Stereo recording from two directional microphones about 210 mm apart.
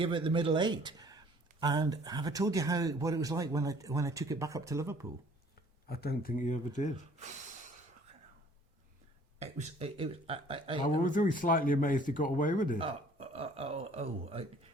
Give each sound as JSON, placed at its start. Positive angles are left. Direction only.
{"t": 0.0, "sound": "speech", "side_deg": -25}
{"t": 5.9, "sound": "speech", "side_deg": 50}
{"t": 9.4, "sound": "speech", "side_deg": -30}
{"t": 10.8, "sound": "speech", "side_deg": 40}
{"t": 12.8, "sound": "speech", "side_deg": -30}